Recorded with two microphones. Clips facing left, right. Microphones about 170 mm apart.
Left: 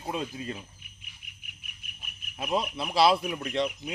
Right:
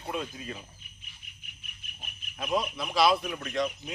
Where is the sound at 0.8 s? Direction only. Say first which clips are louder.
Even; 10° left (ahead or behind).